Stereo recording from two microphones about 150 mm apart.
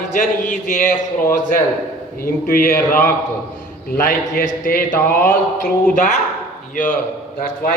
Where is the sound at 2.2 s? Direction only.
75° left (ahead or behind).